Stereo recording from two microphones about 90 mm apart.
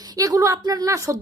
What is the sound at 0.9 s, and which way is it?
Speech, 35° right (ahead or behind).